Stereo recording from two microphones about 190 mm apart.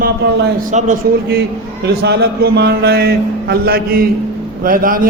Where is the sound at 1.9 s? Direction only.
60° right (ahead or behind).